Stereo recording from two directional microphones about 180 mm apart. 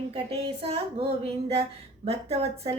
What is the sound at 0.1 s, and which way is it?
Speech, 35° right (ahead or behind).